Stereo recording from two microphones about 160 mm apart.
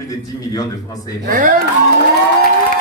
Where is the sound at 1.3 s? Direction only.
55° right (ahead or behind).